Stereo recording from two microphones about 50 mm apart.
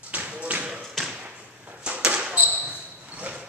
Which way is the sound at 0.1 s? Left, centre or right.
Right.